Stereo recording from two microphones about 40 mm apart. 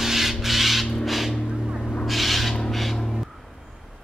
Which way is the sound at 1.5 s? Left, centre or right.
Centre.